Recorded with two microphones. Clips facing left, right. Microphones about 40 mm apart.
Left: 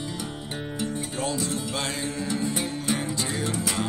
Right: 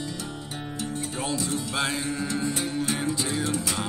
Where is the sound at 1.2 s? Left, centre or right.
Centre.